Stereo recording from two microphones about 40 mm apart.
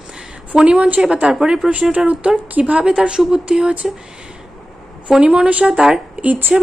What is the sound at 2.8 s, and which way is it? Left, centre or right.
Speech, right.